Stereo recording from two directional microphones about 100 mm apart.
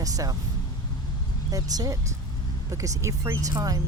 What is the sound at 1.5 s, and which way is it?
Speech, 35° right (ahead or behind).